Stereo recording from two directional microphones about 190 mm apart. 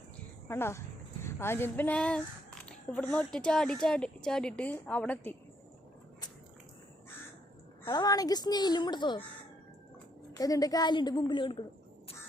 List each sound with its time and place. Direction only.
0.4 s a woman's voice: 15° left (ahead or behind)
7.9 s a woman's voice: 20° left (ahead or behind)
10.3 s a woman's voice: 20° left (ahead or behind)